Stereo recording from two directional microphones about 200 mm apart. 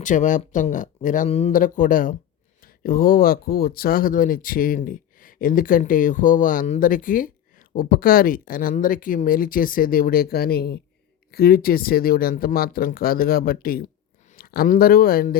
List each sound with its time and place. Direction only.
0.0 s speech: 40° left (ahead or behind)